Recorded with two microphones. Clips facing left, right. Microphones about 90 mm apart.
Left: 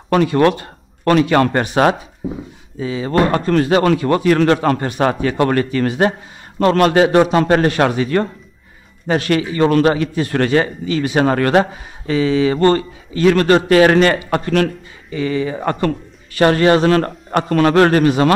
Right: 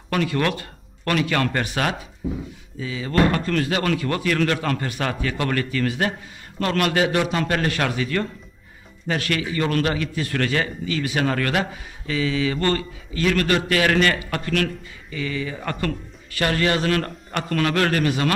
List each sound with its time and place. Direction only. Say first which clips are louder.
0.1 s a man's voice: left 9 dB; 30° left (ahead or behind)